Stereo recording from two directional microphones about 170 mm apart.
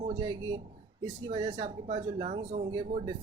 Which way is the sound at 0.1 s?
25° right (ahead or behind).